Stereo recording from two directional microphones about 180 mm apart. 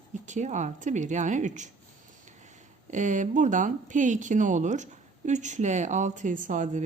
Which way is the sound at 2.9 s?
45° right (ahead or behind).